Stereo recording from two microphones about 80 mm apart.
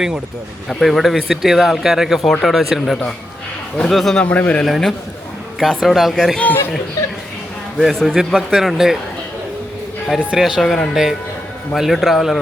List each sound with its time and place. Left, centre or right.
0.7 s speech: centre
4.2 s a man's voice: centre
4.6 s speech: centre
7.8 s speech: centre
10.3 s speech: centre
10.6 s speech: centre